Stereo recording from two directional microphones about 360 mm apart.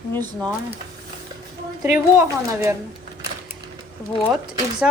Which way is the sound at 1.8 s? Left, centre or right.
Centre.